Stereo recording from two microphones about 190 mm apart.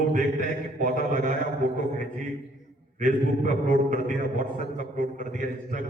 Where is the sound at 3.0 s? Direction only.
40° right (ahead or behind).